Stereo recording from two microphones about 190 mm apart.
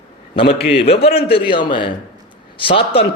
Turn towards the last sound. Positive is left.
turn(degrees=30)  # may be behind; listen again after turning